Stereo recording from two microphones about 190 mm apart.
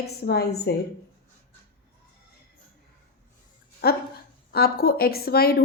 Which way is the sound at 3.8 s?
55° left (ahead or behind).